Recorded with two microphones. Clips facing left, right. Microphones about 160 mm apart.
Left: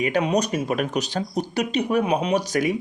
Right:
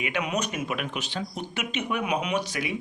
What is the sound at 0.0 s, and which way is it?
Speech, 35° left (ahead or behind).